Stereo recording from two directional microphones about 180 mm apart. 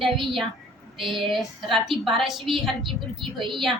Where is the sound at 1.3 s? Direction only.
Centre (ahead or behind).